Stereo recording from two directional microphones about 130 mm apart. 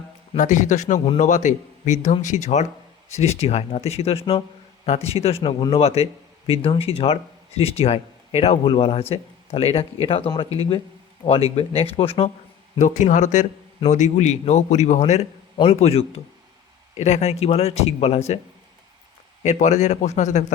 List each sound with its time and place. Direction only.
0.3 s a man's voice: 70° left (ahead or behind); by 10.2 s 50° left (ahead or behind)
10.2 s speech: 35° left (ahead or behind)
11.5 s speech: 50° left (ahead or behind)
12.8 s a man's voice: 70° left (ahead or behind); by 18.3 s 55° left (ahead or behind)
19.4 s speech: 65° left (ahead or behind)